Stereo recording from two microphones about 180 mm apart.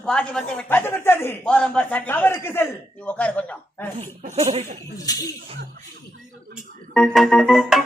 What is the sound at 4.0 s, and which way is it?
Speech, 40° right (ahead or behind).